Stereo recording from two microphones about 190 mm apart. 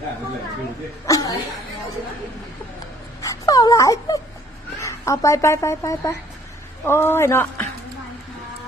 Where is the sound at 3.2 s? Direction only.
20° left (ahead or behind).